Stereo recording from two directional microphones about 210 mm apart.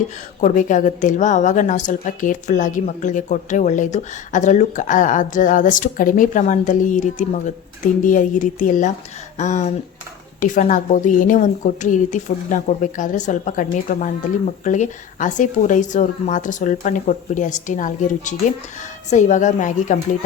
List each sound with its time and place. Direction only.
0.4 s a woman's voice: 35° left (ahead or behind)